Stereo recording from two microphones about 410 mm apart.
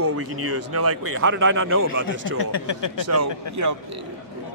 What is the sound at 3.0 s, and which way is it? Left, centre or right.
Speech, right.